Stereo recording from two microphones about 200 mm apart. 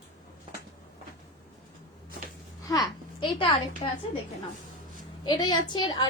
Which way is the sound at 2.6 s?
20° left (ahead or behind).